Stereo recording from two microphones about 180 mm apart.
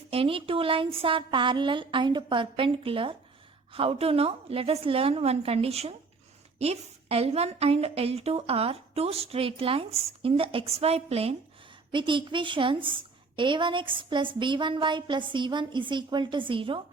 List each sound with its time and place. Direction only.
0.1 s a woman's voice: 30° right (ahead or behind)